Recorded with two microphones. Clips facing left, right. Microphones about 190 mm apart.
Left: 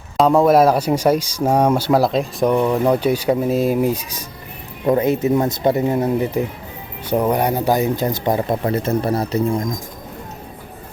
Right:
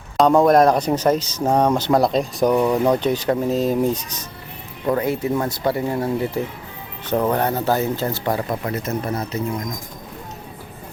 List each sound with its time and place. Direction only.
0.2 s speech: centre (ahead or behind)
4.9 s speech: 20° left (ahead or behind)